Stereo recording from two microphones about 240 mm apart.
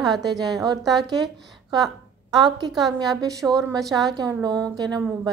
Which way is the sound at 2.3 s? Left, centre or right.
Centre.